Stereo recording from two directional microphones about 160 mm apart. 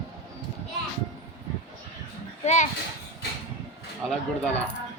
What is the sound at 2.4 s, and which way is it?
Speech, 45° left (ahead or behind).